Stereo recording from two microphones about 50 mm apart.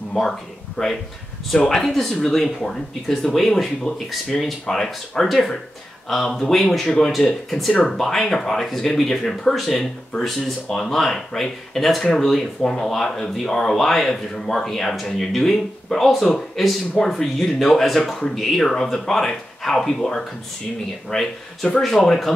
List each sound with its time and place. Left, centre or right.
0.2 s speech: centre